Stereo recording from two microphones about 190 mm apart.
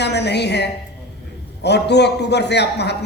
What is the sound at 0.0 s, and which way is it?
A woman's voice, 60° left (ahead or behind).